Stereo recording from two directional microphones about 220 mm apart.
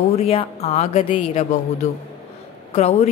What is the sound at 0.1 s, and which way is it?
A man's voice, 30° left (ahead or behind).